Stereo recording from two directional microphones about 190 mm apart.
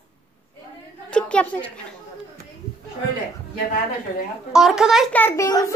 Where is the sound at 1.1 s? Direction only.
5° left (ahead or behind).